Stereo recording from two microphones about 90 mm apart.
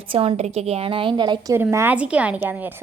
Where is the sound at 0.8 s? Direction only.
75° right (ahead or behind); by 1.5 s 55° right (ahead or behind).